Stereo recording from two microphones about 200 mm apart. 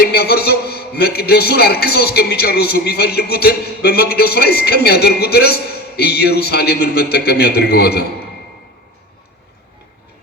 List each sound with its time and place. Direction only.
0.0 s a man's voice: 50° left (ahead or behind)